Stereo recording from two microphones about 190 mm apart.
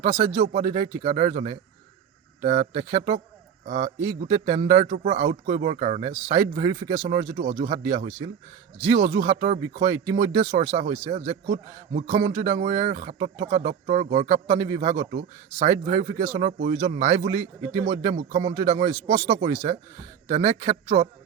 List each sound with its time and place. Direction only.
0.0 s a man's voice: 35° right (ahead or behind)
11.4 s a man's voice: 50° right (ahead or behind)
12.0 s a man's voice: 35° right (ahead or behind)